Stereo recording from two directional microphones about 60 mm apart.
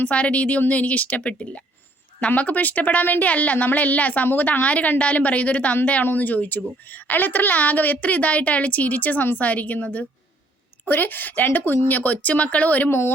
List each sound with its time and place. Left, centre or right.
0.0 s a woman's voice: left
12.9 s speech: left